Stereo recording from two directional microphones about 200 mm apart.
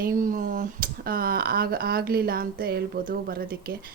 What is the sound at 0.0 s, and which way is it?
Speech, 40° right (ahead or behind).